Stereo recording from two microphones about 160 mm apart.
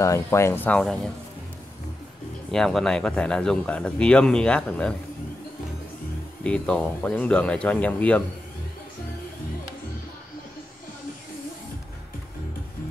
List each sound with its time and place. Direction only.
0.0 s speech: 20° left (ahead or behind)
2.5 s speech: 5° left (ahead or behind)
6.4 s speech: 5° left (ahead or behind)